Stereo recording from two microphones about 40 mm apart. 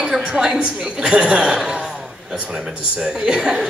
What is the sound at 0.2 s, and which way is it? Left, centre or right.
A woman's voice, centre.